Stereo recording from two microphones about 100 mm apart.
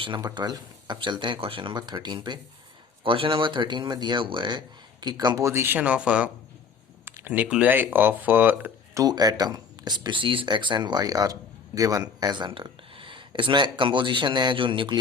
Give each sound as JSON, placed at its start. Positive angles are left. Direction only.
{"t": 0.2, "sound": "speech", "side_deg": -40}
{"t": 3.0, "sound": "speech", "side_deg": -60}
{"t": 9.0, "sound": "speech", "side_deg": -40}